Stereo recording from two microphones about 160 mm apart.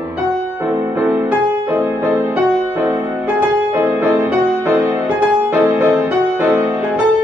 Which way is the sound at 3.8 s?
15° right (ahead or behind).